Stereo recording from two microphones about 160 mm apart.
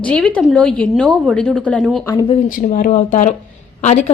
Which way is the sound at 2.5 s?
60° left (ahead or behind).